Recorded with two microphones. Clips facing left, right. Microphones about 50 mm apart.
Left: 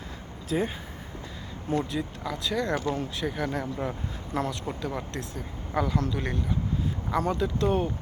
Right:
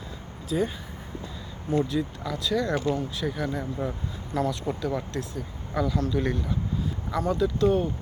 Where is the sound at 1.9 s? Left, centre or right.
Left.